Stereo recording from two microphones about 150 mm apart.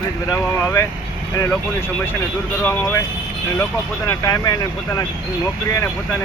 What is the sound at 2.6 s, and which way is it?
Speech, 15° left (ahead or behind).